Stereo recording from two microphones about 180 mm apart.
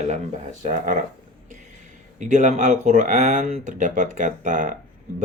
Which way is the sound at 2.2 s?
45° right (ahead or behind).